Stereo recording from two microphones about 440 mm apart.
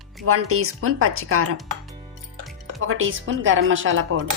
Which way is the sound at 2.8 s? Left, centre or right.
Right.